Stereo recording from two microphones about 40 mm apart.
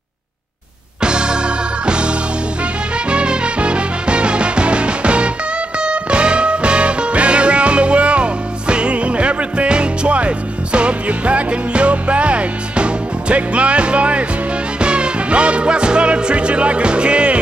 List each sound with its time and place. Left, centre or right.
1.0 s music: right